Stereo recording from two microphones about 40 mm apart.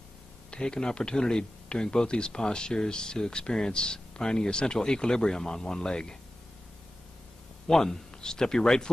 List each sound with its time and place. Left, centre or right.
0.5 s speech: left
7.6 s speech: centre